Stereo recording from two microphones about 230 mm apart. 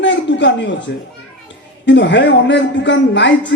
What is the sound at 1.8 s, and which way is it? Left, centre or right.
A woman's voice, left.